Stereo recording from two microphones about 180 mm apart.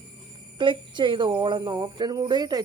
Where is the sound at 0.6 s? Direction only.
25° right (ahead or behind).